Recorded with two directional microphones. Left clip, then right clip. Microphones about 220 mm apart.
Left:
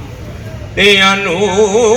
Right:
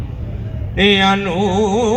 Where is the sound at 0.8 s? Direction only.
20° right (ahead or behind).